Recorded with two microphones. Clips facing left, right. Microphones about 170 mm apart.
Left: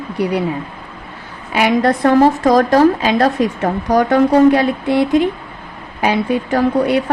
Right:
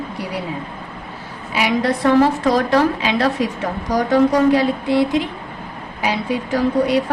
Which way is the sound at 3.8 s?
60° left (ahead or behind).